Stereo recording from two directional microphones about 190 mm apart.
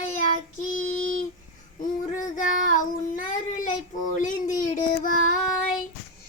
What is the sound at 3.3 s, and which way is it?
Speech, 45° left (ahead or behind).